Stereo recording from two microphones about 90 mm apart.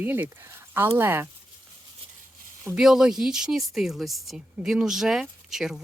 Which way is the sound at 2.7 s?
5° right (ahead or behind).